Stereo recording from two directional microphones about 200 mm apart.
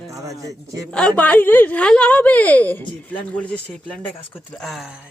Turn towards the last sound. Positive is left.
turn(degrees=0)  # may be behind; listen again after turning